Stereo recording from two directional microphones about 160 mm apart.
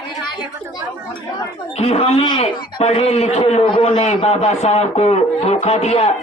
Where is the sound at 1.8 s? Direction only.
40° left (ahead or behind).